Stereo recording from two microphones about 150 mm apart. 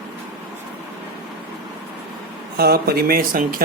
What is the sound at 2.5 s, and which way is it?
Speech, 90° right.